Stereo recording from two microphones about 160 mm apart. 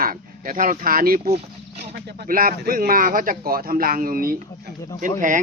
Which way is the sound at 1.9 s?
75° right (ahead or behind).